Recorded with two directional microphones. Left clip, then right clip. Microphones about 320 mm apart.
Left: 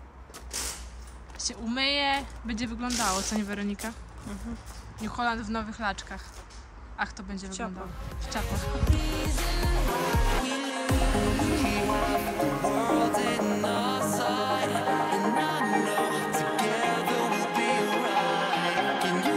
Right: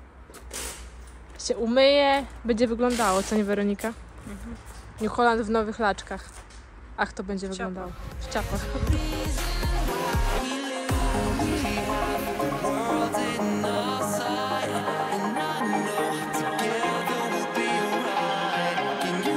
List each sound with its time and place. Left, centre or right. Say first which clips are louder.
1.4 s speech: right 9 dB; centre
5.0 s speech: right 8 dB; centre
7.4 s speech: right 1 dB; left
8.2 s music: right 3 dB; centre